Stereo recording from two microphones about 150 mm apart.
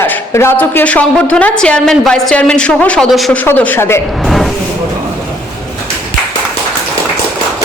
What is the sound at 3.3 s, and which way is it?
Speech, 10° left (ahead or behind).